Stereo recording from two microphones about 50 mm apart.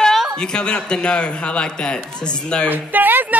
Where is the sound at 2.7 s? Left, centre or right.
Right.